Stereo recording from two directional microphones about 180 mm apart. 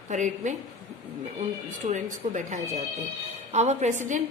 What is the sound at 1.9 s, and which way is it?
A woman's voice, 45° right (ahead or behind).